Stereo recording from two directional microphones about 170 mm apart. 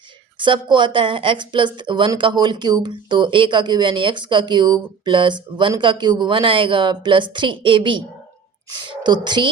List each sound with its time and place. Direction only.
0.3 s speech: 30° right (ahead or behind)